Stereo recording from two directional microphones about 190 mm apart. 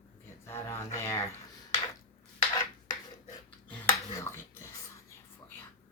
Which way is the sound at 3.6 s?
10° left (ahead or behind).